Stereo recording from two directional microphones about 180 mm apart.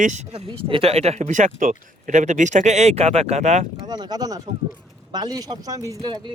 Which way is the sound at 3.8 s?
25° right (ahead or behind).